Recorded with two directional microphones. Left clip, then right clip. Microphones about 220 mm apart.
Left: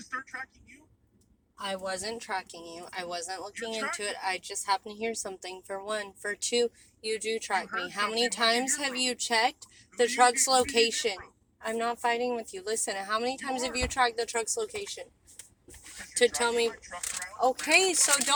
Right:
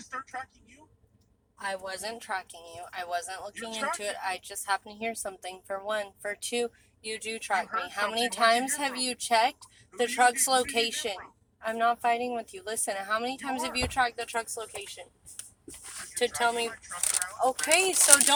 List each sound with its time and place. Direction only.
1.6 s a woman's voice: 35° left (ahead or behind)
10.5 s a woman's voice: 35° left (ahead or behind)
16.1 s a woman's voice: 35° left (ahead or behind)
17.7 s a woman's voice: 35° left (ahead or behind)